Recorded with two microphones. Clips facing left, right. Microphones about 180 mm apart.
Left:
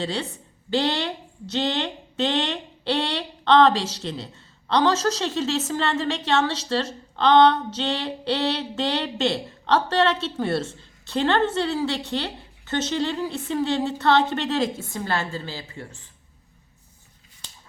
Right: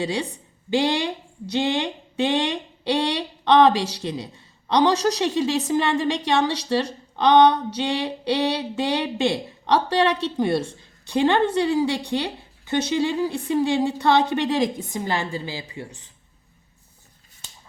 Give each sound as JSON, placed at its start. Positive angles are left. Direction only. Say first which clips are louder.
{"t": 0.0, "sound": "speech", "louder": "right 2 dB", "side_deg": -15}